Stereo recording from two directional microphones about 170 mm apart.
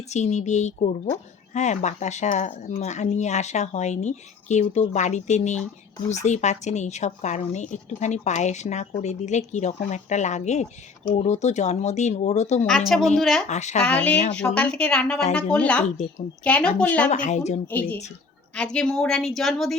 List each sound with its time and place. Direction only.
0.1 s speech: 40° left (ahead or behind)
12.6 s a woman's voice: centre (ahead or behind)
13.5 s speech: 45° left (ahead or behind)
13.8 s speech: 10° left (ahead or behind)
17.1 s speech: 45° left (ahead or behind)
17.7 s a woman's voice: 10° left (ahead or behind)